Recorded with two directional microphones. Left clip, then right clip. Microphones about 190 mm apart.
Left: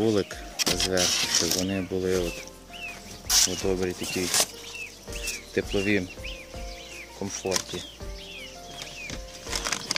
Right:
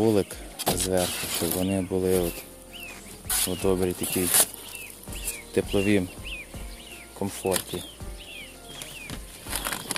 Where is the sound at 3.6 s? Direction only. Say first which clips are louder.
Right 3 dB; 20° right (ahead or behind).